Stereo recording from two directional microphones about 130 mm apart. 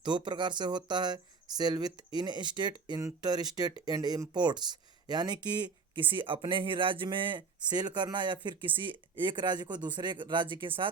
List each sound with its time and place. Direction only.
0.0 s speech: 35° right (ahead or behind)